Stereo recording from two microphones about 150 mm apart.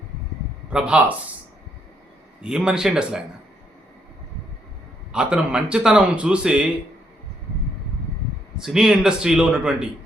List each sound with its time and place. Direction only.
0.7 s speech: 5° right (ahead or behind)
2.4 s a man's voice: 5° right (ahead or behind)
5.1 s speech: 5° right (ahead or behind)
8.5 s a man's voice: 5° right (ahead or behind)